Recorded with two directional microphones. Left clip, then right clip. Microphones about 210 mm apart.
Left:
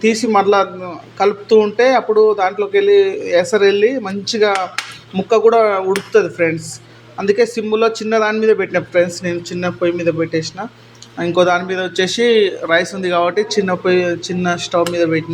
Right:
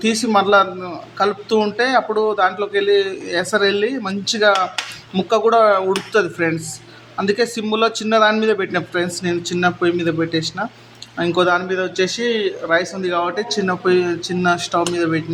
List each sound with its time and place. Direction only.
0.0 s a man's voice: 10° left (ahead or behind)
11.3 s a man's voice: 15° left (ahead or behind)